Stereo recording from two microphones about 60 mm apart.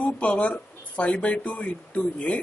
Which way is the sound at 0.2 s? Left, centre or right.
Left.